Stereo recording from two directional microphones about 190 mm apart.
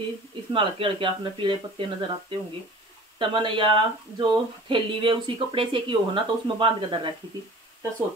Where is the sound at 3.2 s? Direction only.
25° right (ahead or behind).